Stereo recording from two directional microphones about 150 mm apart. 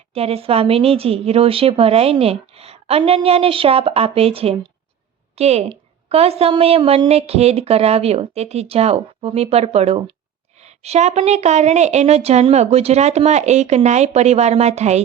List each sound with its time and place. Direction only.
0.1 s a woman's voice: 40° right (ahead or behind)